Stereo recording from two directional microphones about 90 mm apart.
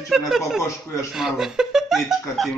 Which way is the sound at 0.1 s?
5° right (ahead or behind).